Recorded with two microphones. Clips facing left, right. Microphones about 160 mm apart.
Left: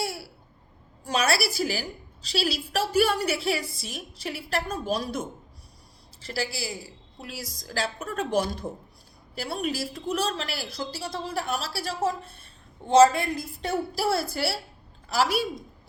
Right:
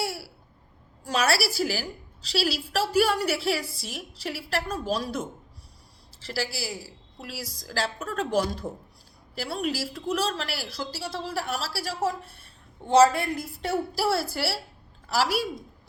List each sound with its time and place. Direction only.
1.0 s a woman's voice: 20° left (ahead or behind)
6.3 s a woman's voice: 20° left (ahead or behind)
6.7 s a woman's voice: 5° right (ahead or behind)
7.3 s a woman's voice: 20° left (ahead or behind)